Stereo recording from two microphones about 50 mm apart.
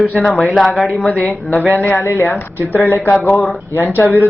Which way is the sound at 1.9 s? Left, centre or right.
Left.